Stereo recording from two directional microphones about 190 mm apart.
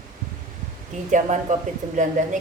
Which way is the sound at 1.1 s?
40° right (ahead or behind).